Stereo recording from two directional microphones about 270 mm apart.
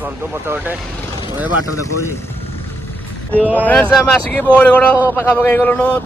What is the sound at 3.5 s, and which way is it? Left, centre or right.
A man's voice, centre.